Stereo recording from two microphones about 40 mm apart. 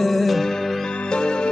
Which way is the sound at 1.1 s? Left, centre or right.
Left.